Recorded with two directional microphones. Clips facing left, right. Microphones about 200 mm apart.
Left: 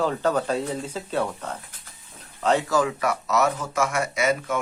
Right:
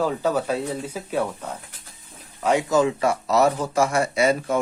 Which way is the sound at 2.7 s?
25° right (ahead or behind).